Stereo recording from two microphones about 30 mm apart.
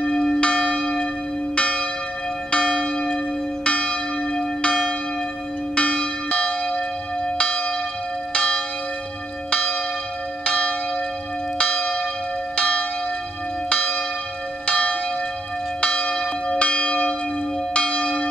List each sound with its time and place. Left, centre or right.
0.4 s church bell: left
7.3 s church bell: left
8.4 s church bell: left
16.5 s church bell: left